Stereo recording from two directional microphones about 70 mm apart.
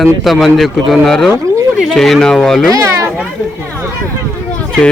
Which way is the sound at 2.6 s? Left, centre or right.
Right.